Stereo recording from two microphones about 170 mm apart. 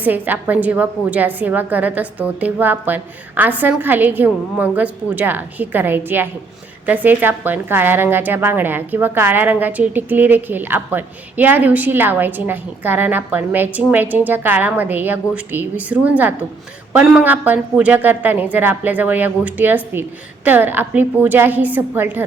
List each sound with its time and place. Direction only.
0.0 s a woman's voice: 10° right (ahead or behind)